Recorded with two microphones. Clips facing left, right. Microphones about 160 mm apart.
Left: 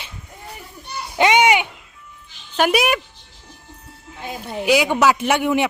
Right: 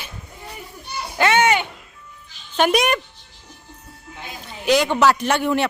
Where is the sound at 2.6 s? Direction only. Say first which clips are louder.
Even; 5° left (ahead or behind).